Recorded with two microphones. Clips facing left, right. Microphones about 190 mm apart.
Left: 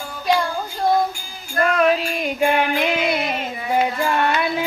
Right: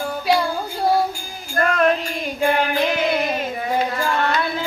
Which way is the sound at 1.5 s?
Centre (ahead or behind).